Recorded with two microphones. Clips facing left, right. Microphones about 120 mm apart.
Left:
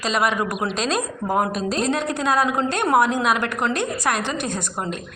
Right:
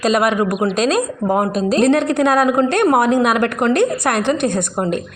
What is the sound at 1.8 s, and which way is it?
A woman's voice, 70° right (ahead or behind).